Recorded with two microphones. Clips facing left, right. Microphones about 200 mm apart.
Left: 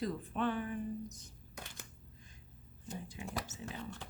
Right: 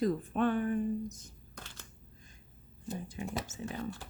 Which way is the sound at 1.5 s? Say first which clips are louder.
Left 1 dB; 15° left (ahead or behind).